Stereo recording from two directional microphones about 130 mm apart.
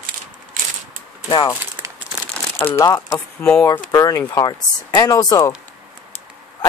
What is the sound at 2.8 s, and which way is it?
Speech, 25° left (ahead or behind).